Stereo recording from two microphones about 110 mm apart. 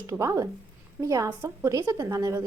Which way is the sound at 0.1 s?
25° right (ahead or behind).